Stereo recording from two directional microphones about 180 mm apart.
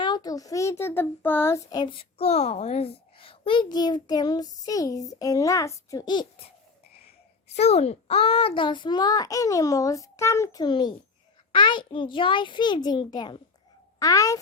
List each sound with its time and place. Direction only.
0.0 s a child's voice: 20° left (ahead or behind)
7.5 s a child's voice: 35° left (ahead or behind); by 14.3 s 20° left (ahead or behind)